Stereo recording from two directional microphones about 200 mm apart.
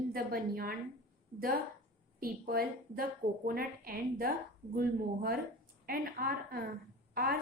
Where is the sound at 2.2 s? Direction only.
50° right (ahead or behind).